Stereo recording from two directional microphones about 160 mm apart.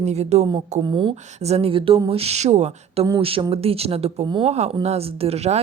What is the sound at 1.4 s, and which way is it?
Speech, 40° right (ahead or behind).